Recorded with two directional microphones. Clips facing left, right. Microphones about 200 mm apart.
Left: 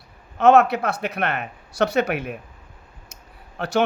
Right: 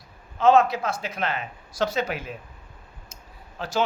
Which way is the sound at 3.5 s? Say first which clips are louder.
Left 6 dB; 65° left (ahead or behind).